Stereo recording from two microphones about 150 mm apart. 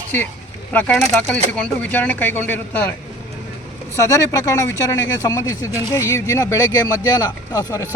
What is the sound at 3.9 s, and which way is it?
Speech, 20° left (ahead or behind).